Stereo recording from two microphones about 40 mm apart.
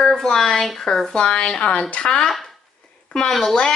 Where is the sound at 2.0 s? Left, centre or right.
Centre.